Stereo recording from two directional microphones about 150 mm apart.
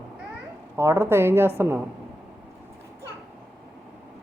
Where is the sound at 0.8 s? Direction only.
20° right (ahead or behind).